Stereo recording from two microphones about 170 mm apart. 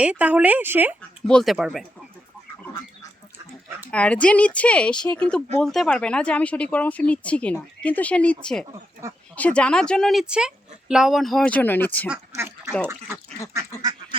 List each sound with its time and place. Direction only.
0.0 s a woman's voice: 10° right (ahead or behind)
1.3 s a woman's voice: centre (ahead or behind)
3.9 s a woman's voice: 5° left (ahead or behind)
12.4 s a sound: 15° right (ahead or behind)
13.8 s duck: 25° right (ahead or behind)